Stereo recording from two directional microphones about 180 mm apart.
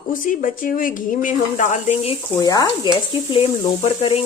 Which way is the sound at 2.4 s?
20° left (ahead or behind).